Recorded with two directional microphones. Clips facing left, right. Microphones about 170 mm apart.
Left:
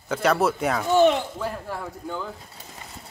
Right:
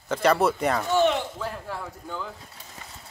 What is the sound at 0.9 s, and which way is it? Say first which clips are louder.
Speech: left 5 dB; 35° left (ahead or behind).